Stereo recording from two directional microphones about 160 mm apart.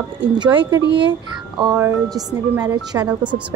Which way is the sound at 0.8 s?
90° right.